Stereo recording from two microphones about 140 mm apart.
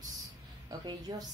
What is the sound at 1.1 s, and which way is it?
Speech, 25° right (ahead or behind).